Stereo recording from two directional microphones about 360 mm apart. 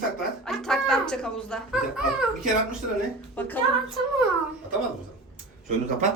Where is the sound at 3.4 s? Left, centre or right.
Centre.